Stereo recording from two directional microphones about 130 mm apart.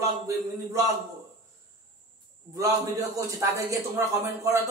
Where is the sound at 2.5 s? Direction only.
25° right (ahead or behind).